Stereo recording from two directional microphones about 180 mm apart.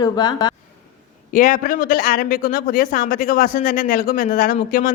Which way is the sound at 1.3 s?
45° left (ahead or behind).